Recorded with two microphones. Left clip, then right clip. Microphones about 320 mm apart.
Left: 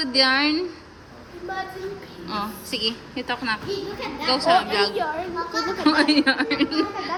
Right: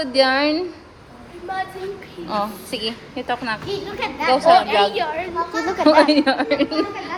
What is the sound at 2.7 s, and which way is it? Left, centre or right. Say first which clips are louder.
Speech: even; centre.